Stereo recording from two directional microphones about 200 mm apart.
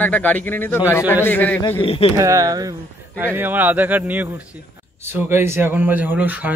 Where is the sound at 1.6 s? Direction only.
25° left (ahead or behind).